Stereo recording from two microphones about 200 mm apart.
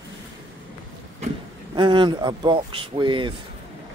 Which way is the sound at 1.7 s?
25° right (ahead or behind).